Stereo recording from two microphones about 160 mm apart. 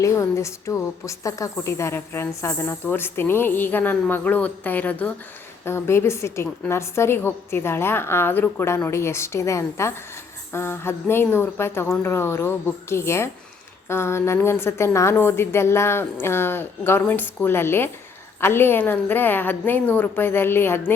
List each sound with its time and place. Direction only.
0.0 s a woman's voice: 20° left (ahead or behind)